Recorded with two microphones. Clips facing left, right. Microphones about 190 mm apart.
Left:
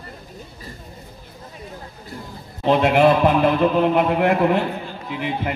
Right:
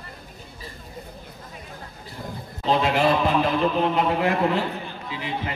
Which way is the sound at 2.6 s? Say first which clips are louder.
Left 5 dB; 60° left (ahead or behind).